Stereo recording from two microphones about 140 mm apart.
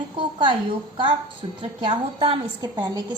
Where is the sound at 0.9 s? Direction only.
35° right (ahead or behind).